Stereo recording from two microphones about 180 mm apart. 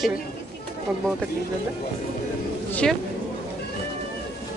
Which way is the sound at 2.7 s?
5° left (ahead or behind).